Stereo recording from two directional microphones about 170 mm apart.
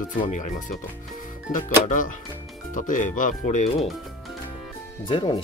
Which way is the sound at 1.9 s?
50° left (ahead or behind).